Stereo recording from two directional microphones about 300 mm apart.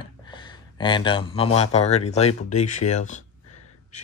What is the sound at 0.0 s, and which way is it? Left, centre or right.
Speech, centre.